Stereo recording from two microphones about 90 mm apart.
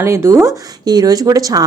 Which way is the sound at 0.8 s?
45° right (ahead or behind).